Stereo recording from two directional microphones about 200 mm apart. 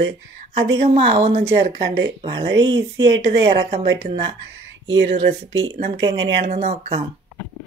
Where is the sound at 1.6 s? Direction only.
60° right (ahead or behind).